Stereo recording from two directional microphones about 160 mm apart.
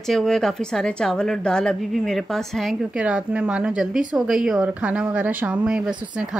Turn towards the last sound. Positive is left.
turn(degrees=-5)  # may be behind; listen again after turning